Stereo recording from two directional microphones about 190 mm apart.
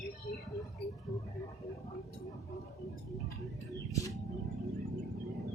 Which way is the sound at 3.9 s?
15° left (ahead or behind).